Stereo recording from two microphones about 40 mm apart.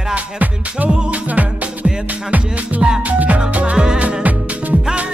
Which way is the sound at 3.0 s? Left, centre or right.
Right.